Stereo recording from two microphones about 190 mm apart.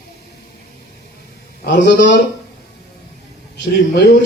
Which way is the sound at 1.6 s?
55° left (ahead or behind).